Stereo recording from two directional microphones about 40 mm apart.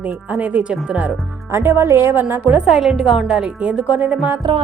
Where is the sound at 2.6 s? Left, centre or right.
Centre.